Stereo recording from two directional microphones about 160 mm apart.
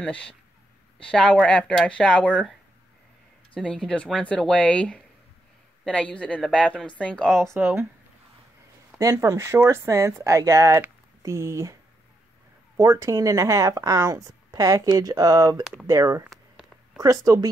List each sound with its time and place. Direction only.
0.0 s speech: 10° left (ahead or behind)
3.5 s speech: 5° left (ahead or behind)
7.5 s speech: 15° right (ahead or behind)
8.9 s speech: 20° right (ahead or behind)
12.7 s speech: 20° right (ahead or behind)
15.6 s speech: centre (ahead or behind)
15.9 s speech: 20° right (ahead or behind)
16.3 s a sound: centre (ahead or behind)
17.0 s speech: 20° right (ahead or behind)